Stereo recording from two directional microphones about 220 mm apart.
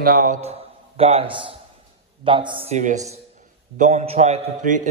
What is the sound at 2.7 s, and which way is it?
A man's voice, 35° right (ahead or behind).